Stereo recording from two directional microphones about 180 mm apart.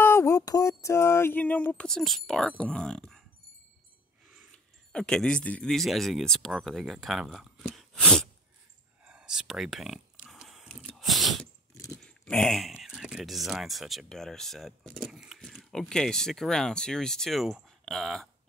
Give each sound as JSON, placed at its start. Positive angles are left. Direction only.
{"t": 0.0, "sound": "a sound", "side_deg": 15}
{"t": 4.3, "sound": "speech", "side_deg": 0}
{"t": 7.7, "sound": "a sound", "side_deg": 5}
{"t": 9.0, "sound": "whispering", "side_deg": -5}
{"t": 11.7, "sound": "dog", "side_deg": 15}
{"t": 12.0, "sound": "speech", "side_deg": 5}